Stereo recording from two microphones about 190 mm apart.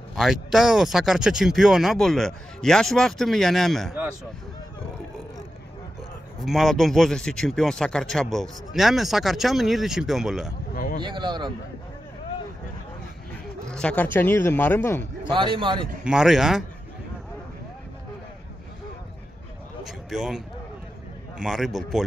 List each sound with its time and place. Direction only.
0.1 s a man's voice: centre (ahead or behind)
6.4 s a man's voice: centre (ahead or behind)
10.7 s a sound: 50° left (ahead or behind)
11.0 s a man's voice: 25° right (ahead or behind)
13.7 s a man's voice: 5° left (ahead or behind)
15.2 s a man's voice: 25° right (ahead or behind)
16.0 s a man's voice: 5° right (ahead or behind)
19.8 s a man's voice: centre (ahead or behind)